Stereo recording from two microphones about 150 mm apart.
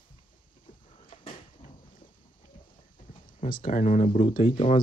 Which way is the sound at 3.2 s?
65° left (ahead or behind).